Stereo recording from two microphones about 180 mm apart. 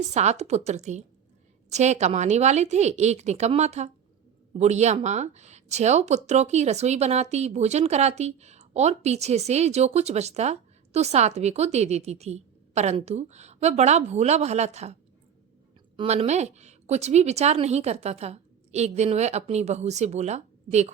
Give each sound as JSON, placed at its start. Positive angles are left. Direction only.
{"t": 0.1, "sound": "speech", "side_deg": -40}
{"t": 16.0, "sound": "speech", "side_deg": -35}